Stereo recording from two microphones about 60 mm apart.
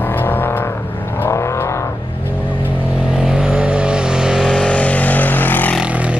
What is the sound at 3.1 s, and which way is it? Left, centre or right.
Vehicle, centre.